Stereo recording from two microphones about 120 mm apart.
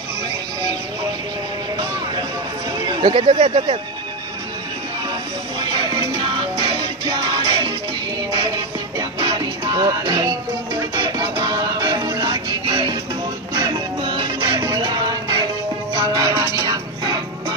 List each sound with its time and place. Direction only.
2.8 s speech: 40° right (ahead or behind)
5.6 s music: 35° right (ahead or behind)
8.9 s music: 35° right (ahead or behind)